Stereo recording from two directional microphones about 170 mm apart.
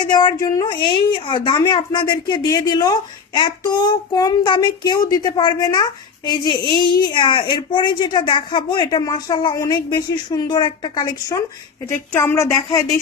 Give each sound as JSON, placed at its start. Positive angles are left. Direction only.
{"t": 0.0, "sound": "a woman's voice", "side_deg": 25}